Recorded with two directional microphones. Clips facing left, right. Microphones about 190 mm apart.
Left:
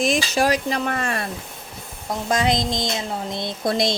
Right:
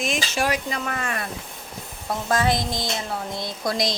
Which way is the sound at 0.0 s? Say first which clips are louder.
Left 5 dB; 35° left (ahead or behind).